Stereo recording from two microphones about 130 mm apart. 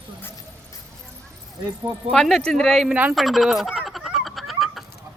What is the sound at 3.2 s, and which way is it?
Duck, centre (ahead or behind).